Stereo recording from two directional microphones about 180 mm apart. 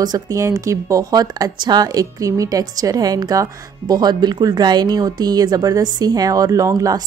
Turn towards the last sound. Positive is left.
turn(degrees=-20)  # may be behind; listen again after turning